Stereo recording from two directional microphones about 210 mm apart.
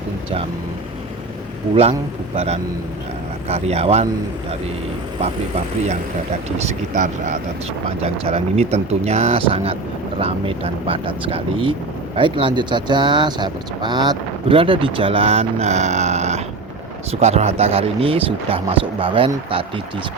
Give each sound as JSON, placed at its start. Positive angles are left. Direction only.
{"t": 1.7, "sound": "speech", "side_deg": -30}
{"t": 6.6, "sound": "speech", "side_deg": -35}